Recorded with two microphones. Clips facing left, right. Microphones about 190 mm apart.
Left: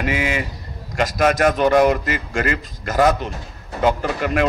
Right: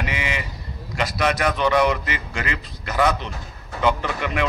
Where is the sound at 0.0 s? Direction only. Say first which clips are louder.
Left 6 dB; 45° left (ahead or behind).